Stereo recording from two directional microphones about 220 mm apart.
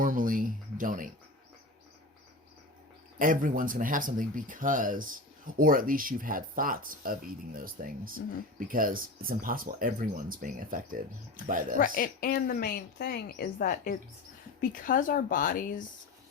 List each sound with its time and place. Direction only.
0.0 s speech: 40° right (ahead or behind)
3.2 s speech: 40° right (ahead or behind)
11.8 s a woman's voice: 40° left (ahead or behind)